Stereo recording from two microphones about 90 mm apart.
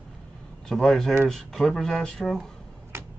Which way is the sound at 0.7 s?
5° left (ahead or behind).